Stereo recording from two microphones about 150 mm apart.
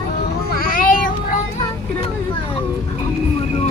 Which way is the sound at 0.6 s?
65° left (ahead or behind).